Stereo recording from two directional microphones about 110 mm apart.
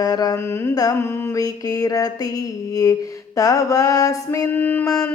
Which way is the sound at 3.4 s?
30° left (ahead or behind).